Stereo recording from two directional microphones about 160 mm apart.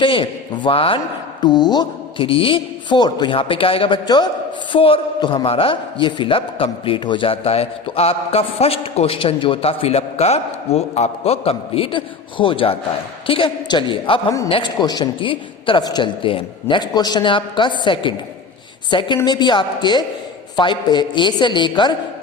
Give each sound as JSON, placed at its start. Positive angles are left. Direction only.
{"t": 0.0, "sound": "a man's voice", "side_deg": 30}